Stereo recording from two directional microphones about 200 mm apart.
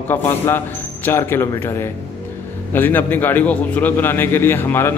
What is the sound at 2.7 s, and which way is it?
A man's voice, 10° left (ahead or behind).